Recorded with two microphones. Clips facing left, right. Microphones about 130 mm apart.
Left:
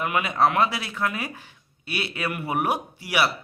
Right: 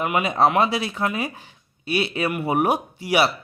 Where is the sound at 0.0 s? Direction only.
20° right (ahead or behind).